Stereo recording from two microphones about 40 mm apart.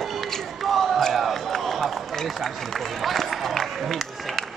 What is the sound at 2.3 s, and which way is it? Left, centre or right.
Speech, centre.